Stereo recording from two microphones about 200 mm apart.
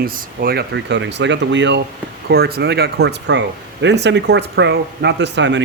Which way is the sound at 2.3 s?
50° right (ahead or behind).